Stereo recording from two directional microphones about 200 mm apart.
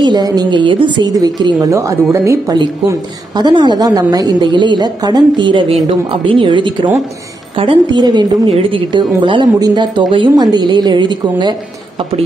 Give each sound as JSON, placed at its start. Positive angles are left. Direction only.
{"t": 0.0, "sound": "a woman's voice", "side_deg": -20}